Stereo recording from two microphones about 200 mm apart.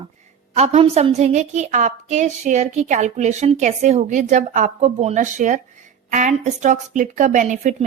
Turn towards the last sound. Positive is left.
turn(degrees=-40)  # may be behind; listen again after turning